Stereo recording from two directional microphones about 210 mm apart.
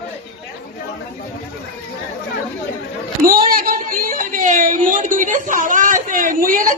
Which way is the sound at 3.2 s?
45° right (ahead or behind).